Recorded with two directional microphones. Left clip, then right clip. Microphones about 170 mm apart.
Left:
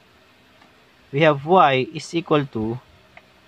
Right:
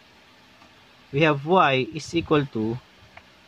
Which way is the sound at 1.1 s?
25° left (ahead or behind).